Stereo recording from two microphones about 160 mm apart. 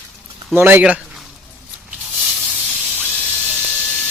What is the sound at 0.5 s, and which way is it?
Speech, 10° right (ahead or behind).